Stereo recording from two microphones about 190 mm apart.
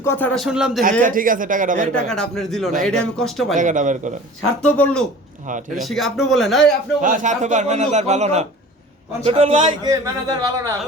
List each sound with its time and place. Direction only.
0.0 s speech: 10° left (ahead or behind)
1.0 s speech: 45° right (ahead or behind)
2.0 s speech: 5° left (ahead or behind)
3.5 s a man's voice: 40° right (ahead or behind)
4.6 s speech: 5° left (ahead or behind)
7.0 s a man's voice: 45° right (ahead or behind); by 10.7 s 15° right (ahead or behind)